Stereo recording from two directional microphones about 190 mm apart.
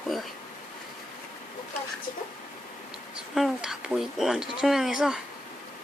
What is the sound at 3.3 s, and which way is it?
Speech, centre (ahead or behind).